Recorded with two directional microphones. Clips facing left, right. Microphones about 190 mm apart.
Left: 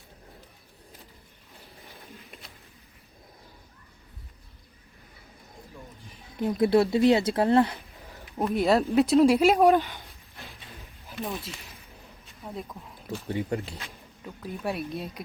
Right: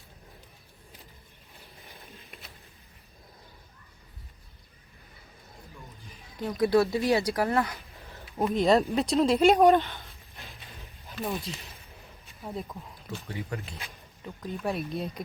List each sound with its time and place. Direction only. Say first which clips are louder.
6.3 s speech: left 2 dB; 25° left (ahead or behind)
8.4 s speech: even; centre (ahead or behind)
11.1 s speech: right 1 dB; 5° left (ahead or behind)
13.3 s speech: left 8 dB; 30° left (ahead or behind)
14.4 s speech: even; 5° left (ahead or behind)